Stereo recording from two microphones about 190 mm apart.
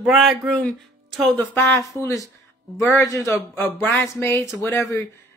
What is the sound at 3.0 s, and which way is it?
Speech, 15° left (ahead or behind).